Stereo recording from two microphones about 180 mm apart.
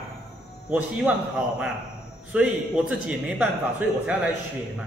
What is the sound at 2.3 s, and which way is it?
Speech, 5° right (ahead or behind).